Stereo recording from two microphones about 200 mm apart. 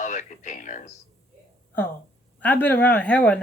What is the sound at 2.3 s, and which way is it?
Speech, 10° left (ahead or behind).